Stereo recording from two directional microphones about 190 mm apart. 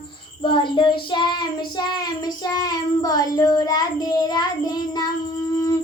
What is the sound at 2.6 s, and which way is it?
Child singing, 20° left (ahead or behind).